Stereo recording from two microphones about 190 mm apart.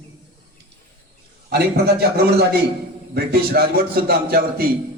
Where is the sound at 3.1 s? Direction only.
55° right (ahead or behind).